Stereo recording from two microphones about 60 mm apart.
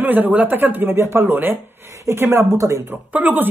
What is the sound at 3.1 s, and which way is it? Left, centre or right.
Speech, right.